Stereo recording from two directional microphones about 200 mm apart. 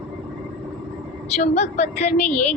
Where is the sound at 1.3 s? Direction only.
35° left (ahead or behind).